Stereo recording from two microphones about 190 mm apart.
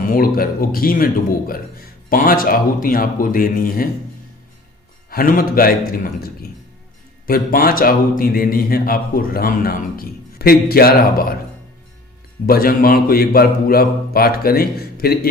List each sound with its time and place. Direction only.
0.0 s a man's voice: 50° left (ahead or behind)
5.1 s a man's voice: 45° left (ahead or behind)
7.3 s a man's voice: 50° left (ahead or behind)
12.5 s a man's voice: 50° left (ahead or behind)